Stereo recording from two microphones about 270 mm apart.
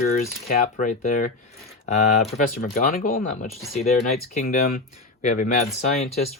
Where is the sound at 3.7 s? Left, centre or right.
Left.